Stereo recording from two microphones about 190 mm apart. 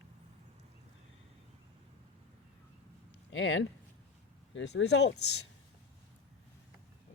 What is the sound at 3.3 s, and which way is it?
Speech, 80° left.